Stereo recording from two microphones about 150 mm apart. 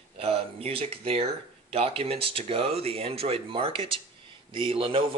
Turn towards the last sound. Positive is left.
turn(degrees=-35)  # may be behind; listen again after turning